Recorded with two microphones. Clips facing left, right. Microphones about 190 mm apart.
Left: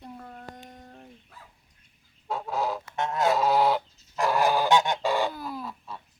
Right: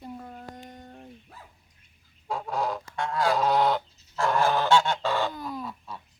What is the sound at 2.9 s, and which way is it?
Goose, 20° left (ahead or behind).